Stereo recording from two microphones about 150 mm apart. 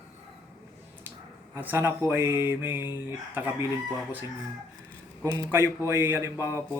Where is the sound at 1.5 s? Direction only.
15° right (ahead or behind).